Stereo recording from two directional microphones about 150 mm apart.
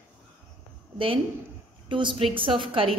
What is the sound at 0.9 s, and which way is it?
A woman's voice, 35° right (ahead or behind).